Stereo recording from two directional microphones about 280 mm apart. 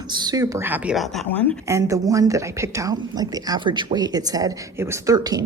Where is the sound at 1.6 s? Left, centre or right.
Centre.